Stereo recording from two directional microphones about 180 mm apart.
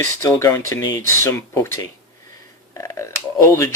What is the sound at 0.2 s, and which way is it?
Speech, 20° left (ahead or behind).